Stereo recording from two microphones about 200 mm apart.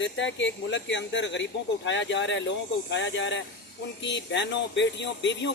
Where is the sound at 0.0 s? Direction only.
65° left (ahead or behind).